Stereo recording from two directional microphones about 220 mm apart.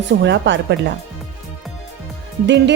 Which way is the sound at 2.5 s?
50° right (ahead or behind).